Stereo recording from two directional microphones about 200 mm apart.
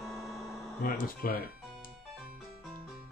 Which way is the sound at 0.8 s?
45° left (ahead or behind).